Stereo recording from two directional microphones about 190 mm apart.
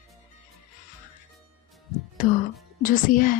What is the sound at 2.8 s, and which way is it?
Speech, 45° left (ahead or behind).